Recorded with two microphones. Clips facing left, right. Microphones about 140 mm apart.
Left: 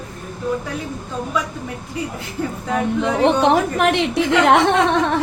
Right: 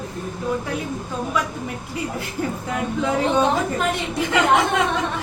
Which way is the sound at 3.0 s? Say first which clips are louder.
Left 2 dB; 75° left (ahead or behind).